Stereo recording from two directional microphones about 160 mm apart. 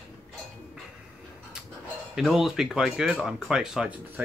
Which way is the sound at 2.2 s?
Centre (ahead or behind).